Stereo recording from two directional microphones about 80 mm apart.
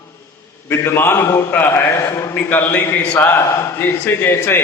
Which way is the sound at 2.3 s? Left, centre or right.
Left.